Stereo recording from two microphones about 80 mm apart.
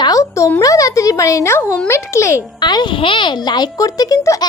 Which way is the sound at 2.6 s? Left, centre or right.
Left.